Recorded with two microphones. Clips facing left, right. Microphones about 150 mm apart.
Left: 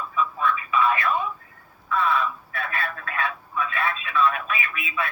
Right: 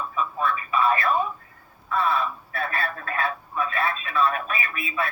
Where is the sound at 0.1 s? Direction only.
40° right (ahead or behind).